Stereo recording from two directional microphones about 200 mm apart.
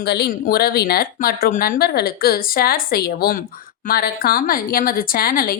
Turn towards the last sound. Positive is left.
turn(degrees=45)  # may be behind; listen again after turning